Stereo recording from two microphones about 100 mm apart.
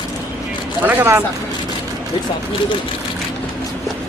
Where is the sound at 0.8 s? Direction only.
20° right (ahead or behind).